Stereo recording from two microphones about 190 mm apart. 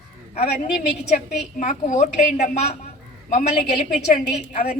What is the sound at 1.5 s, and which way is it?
A woman's voice, 40° left (ahead or behind).